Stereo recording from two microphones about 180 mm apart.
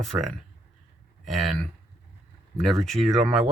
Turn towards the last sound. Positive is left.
turn(degrees=0)  # may be behind; listen again after turning